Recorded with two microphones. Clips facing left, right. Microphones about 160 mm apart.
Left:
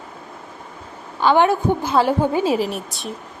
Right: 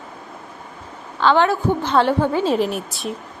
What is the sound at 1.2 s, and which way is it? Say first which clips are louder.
A woman's voice: left 1 dB; 15° left (ahead or behind).